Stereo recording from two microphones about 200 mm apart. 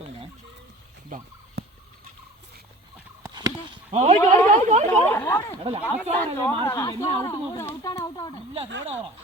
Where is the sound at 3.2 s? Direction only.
20° right (ahead or behind).